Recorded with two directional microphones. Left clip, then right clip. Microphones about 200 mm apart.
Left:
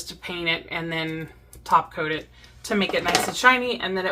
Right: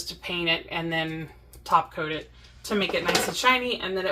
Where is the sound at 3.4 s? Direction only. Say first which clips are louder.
Left 6 dB; 20° left (ahead or behind).